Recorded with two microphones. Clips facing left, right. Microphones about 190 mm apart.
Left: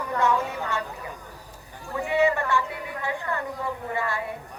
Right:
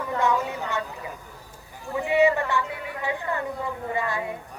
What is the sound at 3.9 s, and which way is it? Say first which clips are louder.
Speech: right 2 dB; 20° right (ahead or behind).